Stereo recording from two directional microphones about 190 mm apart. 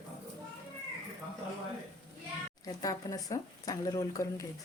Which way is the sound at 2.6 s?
20° left (ahead or behind).